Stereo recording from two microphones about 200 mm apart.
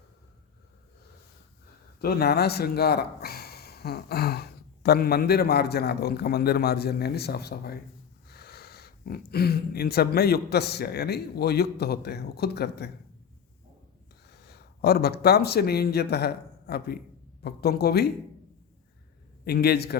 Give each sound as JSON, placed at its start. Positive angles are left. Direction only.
{"t": 2.0, "sound": "speech", "side_deg": 50}
{"t": 14.3, "sound": "speech", "side_deg": 55}
{"t": 19.5, "sound": "speech", "side_deg": 50}